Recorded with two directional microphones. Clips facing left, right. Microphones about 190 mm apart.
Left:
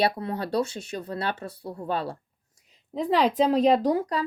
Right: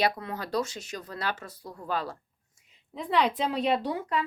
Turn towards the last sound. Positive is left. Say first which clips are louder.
# left 5 dB
turn(degrees=35)  # may be behind; listen again after turning